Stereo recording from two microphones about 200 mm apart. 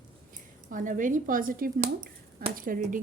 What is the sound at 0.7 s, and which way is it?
Speech, 40° right (ahead or behind).